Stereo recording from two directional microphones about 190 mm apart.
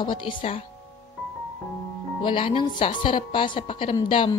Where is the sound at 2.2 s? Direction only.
25° left (ahead or behind).